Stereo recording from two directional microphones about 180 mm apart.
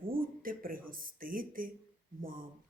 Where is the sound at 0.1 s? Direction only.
50° right (ahead or behind).